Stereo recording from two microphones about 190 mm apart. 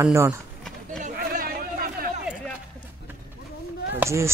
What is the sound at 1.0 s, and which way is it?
Chatter, 45° right (ahead or behind).